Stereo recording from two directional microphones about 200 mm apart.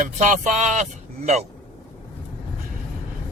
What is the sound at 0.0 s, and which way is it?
A man's voice, 35° right (ahead or behind).